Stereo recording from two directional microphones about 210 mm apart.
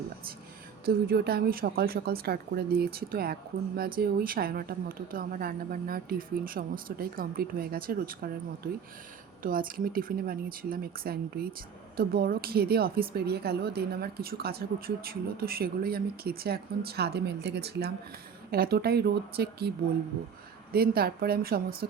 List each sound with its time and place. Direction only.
0.9 s speech: 50° right (ahead or behind)
9.4 s speech: 40° right (ahead or behind)
20.7 s speech: 45° right (ahead or behind)